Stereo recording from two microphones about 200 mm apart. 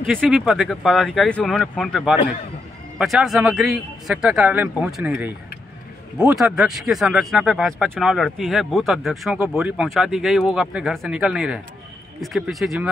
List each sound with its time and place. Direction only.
0.0 s speech: 5° right (ahead or behind)